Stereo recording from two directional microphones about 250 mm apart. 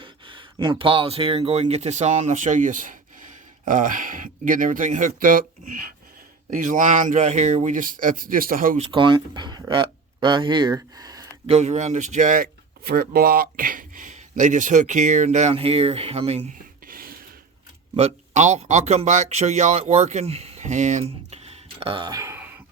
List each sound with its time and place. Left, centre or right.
0.0 s speech: centre
8.9 s speech: centre